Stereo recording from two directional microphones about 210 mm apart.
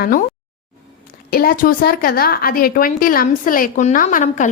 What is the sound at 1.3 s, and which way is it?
A woman's voice, 45° left (ahead or behind).